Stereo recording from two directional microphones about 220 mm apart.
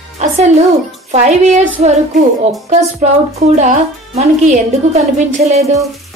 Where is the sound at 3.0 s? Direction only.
30° right (ahead or behind).